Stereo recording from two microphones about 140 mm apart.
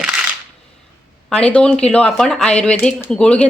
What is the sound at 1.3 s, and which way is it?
Speech, 10° left (ahead or behind).